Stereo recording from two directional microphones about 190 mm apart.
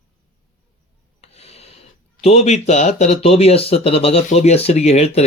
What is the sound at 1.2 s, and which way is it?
Rub, 35° left (ahead or behind).